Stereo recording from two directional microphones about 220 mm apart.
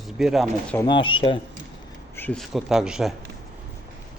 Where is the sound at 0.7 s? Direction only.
20° left (ahead or behind).